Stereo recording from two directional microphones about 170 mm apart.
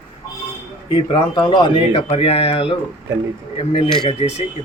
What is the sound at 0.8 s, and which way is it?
Speech, 25° left (ahead or behind).